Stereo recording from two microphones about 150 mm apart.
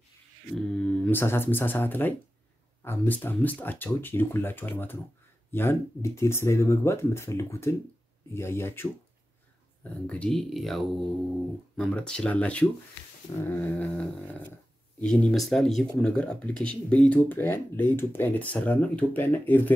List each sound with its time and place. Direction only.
0.6 s speech: 5° left (ahead or behind)
10.0 s speech: 10° left (ahead or behind)